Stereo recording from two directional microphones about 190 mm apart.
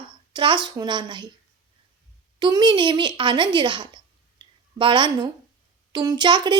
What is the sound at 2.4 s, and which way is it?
A woman's voice, 25° right (ahead or behind).